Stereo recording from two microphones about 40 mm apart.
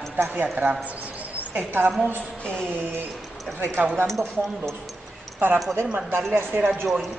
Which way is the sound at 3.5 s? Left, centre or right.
Right.